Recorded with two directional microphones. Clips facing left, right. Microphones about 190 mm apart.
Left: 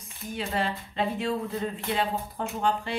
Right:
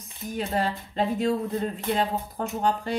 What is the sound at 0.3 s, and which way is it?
Speech, 40° right (ahead or behind).